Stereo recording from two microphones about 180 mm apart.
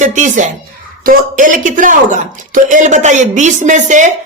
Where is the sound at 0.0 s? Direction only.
45° right (ahead or behind).